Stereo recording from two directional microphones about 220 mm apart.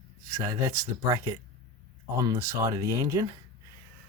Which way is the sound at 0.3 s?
15° right (ahead or behind).